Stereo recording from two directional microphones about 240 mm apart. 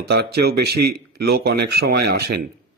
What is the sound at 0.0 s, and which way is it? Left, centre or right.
A man's voice, right.